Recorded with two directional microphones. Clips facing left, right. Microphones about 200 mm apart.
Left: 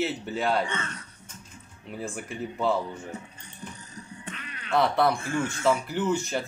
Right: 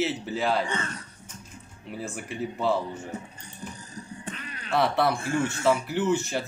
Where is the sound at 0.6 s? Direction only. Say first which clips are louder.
Right 2 dB; 35° right (ahead or behind).